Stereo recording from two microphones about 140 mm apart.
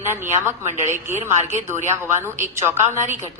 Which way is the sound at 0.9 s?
15° right (ahead or behind).